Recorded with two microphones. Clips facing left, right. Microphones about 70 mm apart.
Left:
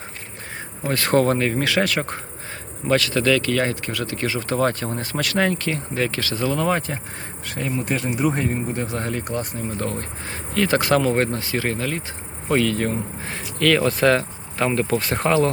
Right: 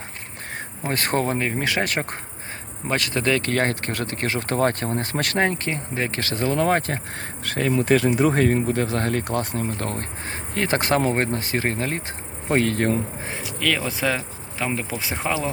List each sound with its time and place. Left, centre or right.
0.9 s speech: right
1.2 s speech: centre; by 7.0 s right
7.4 s speech: right
13.6 s speech: centre